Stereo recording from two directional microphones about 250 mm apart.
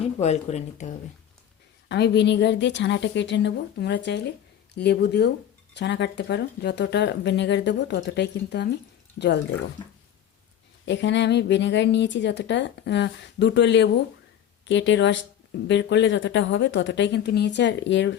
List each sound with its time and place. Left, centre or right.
0.2 s speech: left
1.9 s speech: left
10.8 s speech: left